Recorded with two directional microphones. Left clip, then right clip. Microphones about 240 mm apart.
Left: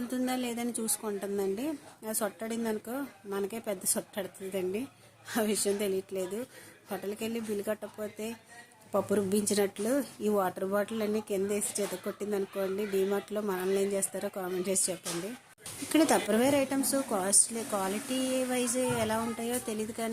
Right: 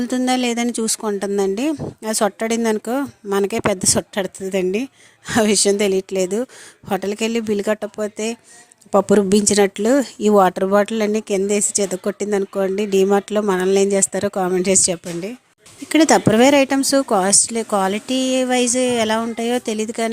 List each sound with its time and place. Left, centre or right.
0.1 s speech: right